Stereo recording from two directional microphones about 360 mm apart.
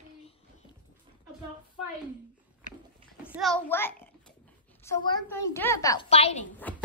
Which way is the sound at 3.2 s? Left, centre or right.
Centre.